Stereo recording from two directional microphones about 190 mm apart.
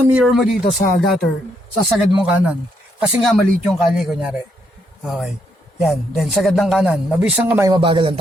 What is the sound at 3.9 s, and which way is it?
A man's voice, centre (ahead or behind).